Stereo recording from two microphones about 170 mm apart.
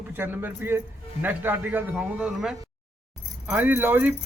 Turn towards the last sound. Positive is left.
turn(degrees=-10)  # may be behind; listen again after turning